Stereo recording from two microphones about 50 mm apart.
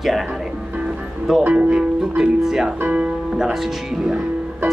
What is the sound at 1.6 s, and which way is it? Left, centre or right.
Speech, right.